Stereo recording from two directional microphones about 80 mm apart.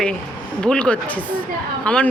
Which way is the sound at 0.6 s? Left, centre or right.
Centre.